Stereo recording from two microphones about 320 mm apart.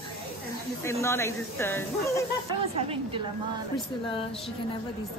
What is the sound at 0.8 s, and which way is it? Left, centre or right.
Speech, centre.